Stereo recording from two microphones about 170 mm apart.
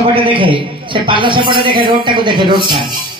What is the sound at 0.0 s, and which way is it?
A man's voice, 30° right (ahead or behind).